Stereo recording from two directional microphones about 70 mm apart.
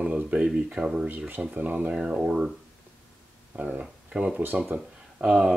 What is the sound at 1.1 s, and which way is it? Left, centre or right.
Speech, right.